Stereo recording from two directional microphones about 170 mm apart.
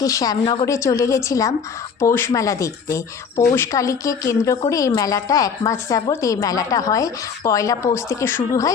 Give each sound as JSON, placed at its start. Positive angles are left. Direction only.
{"t": 0.0, "sound": "speech", "side_deg": 20}